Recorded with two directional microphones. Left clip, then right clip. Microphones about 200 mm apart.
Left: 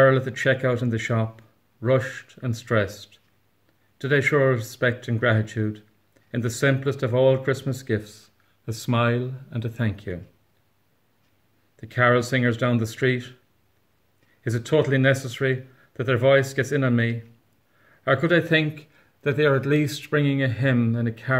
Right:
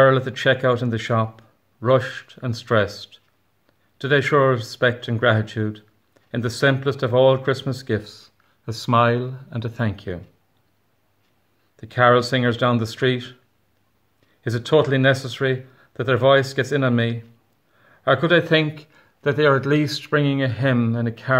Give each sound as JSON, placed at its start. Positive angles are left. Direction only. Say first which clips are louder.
{"t": 0.0, "sound": "speech", "louder": "right 3 dB", "side_deg": 5}
{"t": 11.8, "sound": "speech", "louder": "right 4 dB", "side_deg": 5}
{"t": 14.4, "sound": "a man's voice", "louder": "right 4 dB", "side_deg": 5}